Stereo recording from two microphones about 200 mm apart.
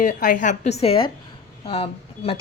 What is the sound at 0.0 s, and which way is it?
A woman's voice, 40° left (ahead or behind).